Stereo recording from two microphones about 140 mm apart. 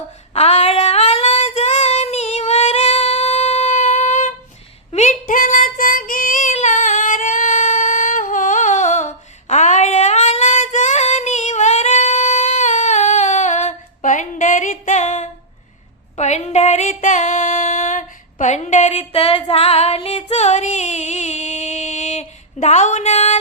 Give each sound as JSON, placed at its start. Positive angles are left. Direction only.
{"t": 0.3, "sound": "child singing", "side_deg": 50}
{"t": 4.9, "sound": "a sound", "side_deg": 55}
{"t": 5.2, "sound": "female singing", "side_deg": 75}
{"t": 6.5, "sound": "singing", "side_deg": 60}
{"t": 16.1, "sound": "female singing", "side_deg": 55}